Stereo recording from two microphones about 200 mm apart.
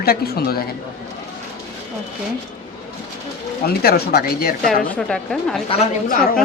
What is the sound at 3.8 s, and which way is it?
Speech, 50° left (ahead or behind).